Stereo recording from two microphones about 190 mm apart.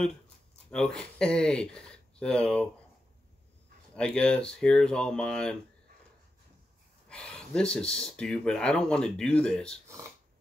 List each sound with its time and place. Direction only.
0.7 s speech: 5° left (ahead or behind)
3.9 s speech: 5° left (ahead or behind)
7.1 s speech: 5° left (ahead or behind)